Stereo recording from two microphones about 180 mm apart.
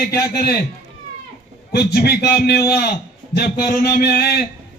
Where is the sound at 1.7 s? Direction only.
65° left (ahead or behind).